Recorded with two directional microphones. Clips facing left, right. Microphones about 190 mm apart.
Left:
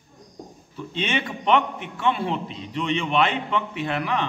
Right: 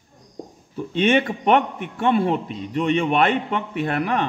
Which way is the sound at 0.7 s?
50° right (ahead or behind).